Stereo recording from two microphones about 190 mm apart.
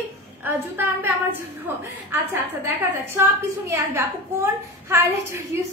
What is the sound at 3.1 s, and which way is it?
Speech, 15° right (ahead or behind).